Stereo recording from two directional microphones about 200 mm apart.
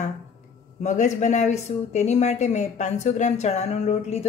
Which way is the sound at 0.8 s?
35° left (ahead or behind).